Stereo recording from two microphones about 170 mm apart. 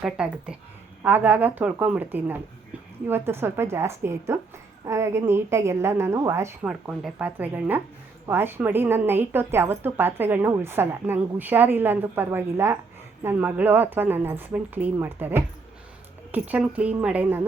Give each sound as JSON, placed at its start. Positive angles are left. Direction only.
{"t": 0.0, "sound": "a woman's voice", "side_deg": -5}